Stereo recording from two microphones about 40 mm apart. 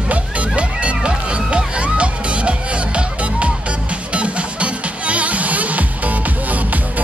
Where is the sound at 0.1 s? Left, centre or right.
Right.